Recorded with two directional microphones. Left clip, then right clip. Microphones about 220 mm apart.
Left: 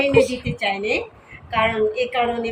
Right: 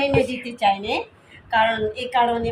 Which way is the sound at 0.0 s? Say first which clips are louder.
Left 3 dB; 45° right (ahead or behind).